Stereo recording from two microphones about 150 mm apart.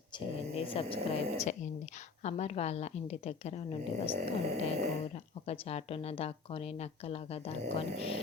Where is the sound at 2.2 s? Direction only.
45° left (ahead or behind).